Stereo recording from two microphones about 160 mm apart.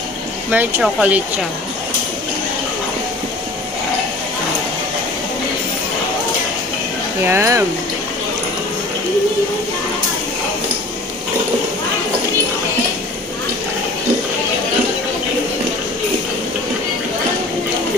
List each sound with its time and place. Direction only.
0.5 s speech: 10° right (ahead or behind)
7.2 s speech: 15° right (ahead or behind)